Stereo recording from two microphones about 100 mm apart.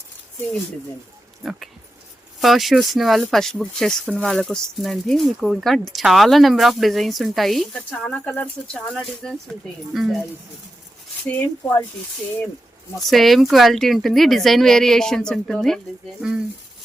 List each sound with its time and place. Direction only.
1.5 s speech: centre (ahead or behind)
7.9 s speech: 15° left (ahead or behind)
11.3 s speech: 20° left (ahead or behind)
13.0 s speech: centre (ahead or behind)
16.2 s speech: 10° right (ahead or behind)